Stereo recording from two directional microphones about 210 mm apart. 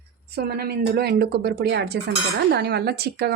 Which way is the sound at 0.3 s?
50° right (ahead or behind).